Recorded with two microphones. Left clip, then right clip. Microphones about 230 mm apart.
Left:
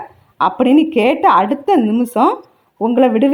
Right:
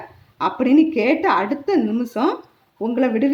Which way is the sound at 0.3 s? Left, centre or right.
Left.